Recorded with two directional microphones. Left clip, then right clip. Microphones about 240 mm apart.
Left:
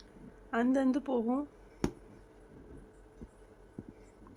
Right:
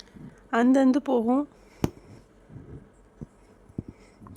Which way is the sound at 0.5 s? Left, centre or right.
Right.